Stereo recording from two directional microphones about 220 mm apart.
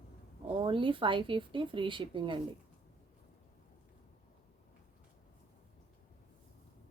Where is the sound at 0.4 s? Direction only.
25° right (ahead or behind).